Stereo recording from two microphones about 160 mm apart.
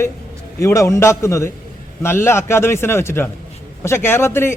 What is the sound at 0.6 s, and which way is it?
A man's voice, 20° left (ahead or behind).